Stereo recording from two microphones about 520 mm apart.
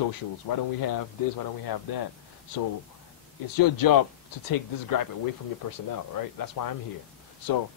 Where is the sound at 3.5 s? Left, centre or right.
Left.